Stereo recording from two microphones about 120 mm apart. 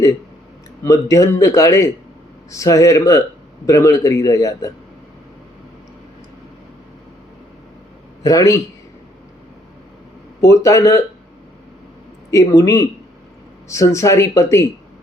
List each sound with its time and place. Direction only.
0.9 s a man's voice: 25° left (ahead or behind)
8.2 s a man's voice: 30° left (ahead or behind)
10.4 s a man's voice: 25° left (ahead or behind)
12.3 s a man's voice: 30° left (ahead or behind)